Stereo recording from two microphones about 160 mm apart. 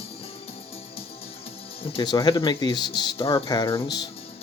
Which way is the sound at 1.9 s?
25° left (ahead or behind).